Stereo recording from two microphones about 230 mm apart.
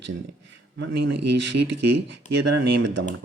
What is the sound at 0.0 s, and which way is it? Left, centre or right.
A man's voice, right.